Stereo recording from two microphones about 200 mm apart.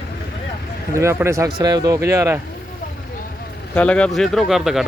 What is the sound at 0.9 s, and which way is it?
Speech, 15° right (ahead or behind).